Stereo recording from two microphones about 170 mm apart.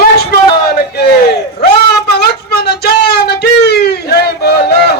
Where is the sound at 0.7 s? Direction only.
70° left (ahead or behind).